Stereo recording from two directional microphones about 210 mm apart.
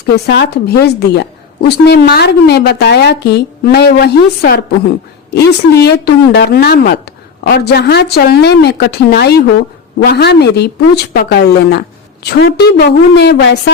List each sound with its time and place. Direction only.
0.3 s a woman's voice: 55° left (ahead or behind)